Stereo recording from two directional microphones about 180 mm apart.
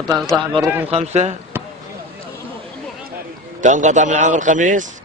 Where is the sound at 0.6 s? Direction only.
10° right (ahead or behind).